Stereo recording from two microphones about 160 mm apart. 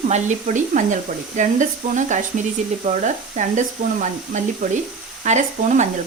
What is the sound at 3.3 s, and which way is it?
Speech, 50° right (ahead or behind).